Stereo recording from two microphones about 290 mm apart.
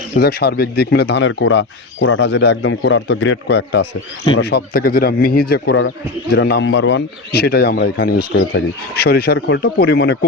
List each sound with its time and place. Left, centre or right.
0.2 s speech: left